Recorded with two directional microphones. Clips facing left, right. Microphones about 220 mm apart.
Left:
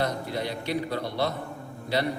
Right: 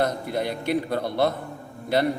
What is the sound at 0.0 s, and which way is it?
A woman's voice, 50° right (ahead or behind).